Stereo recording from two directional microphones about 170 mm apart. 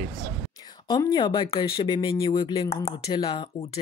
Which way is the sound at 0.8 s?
25° left (ahead or behind).